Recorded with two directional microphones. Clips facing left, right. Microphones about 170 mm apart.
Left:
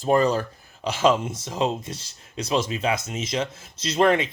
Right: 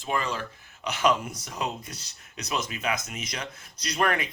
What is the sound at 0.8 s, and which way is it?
Speech, 25° left (ahead or behind).